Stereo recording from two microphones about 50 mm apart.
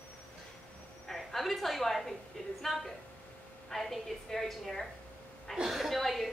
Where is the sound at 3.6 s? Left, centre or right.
Centre.